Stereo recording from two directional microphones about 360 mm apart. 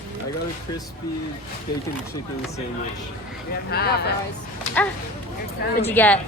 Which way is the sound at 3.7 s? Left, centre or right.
Left.